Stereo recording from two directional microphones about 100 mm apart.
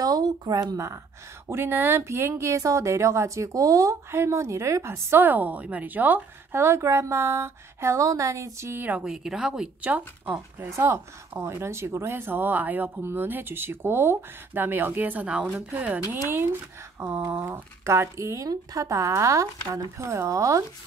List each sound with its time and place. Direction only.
0.0 s speech: 40° right (ahead or behind)
1.5 s speech: 20° right (ahead or behind)
9.0 s speech: 5° right (ahead or behind)
10.7 s speech: 25° right (ahead or behind)